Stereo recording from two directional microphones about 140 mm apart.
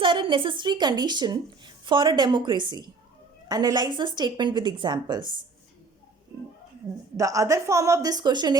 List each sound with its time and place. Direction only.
0.0 s a woman's voice: 35° right (ahead or behind)
7.2 s a woman's voice: 25° right (ahead or behind)